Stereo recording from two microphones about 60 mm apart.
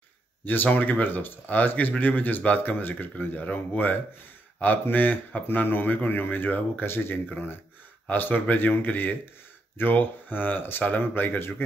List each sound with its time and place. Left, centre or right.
0.5 s speech: left